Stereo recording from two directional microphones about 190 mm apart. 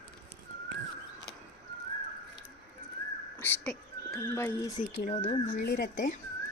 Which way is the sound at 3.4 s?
5° left (ahead or behind).